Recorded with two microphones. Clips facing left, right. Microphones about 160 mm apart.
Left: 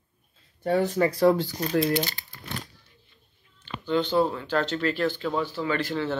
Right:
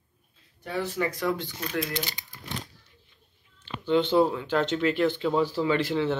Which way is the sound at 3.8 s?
20° right (ahead or behind).